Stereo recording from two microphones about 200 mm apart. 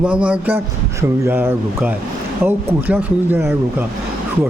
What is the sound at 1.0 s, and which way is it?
Speech, 10° right (ahead or behind).